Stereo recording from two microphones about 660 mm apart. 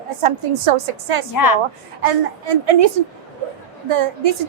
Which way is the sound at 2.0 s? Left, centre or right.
Right.